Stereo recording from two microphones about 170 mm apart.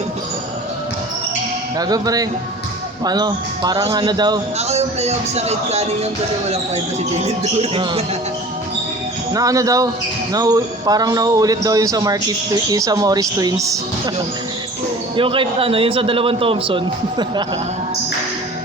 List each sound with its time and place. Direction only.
1.8 s speech: 20° right (ahead or behind)
4.5 s a man's voice: 40° right (ahead or behind)
7.2 s a man's voice: 40° right (ahead or behind)
9.3 s speech: 20° right (ahead or behind)
15.1 s a man's voice: 30° right (ahead or behind)